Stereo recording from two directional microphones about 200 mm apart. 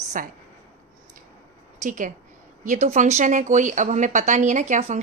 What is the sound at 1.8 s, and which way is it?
Speech, 40° right (ahead or behind).